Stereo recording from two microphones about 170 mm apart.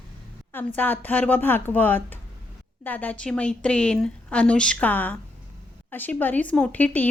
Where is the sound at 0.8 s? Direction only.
10° left (ahead or behind).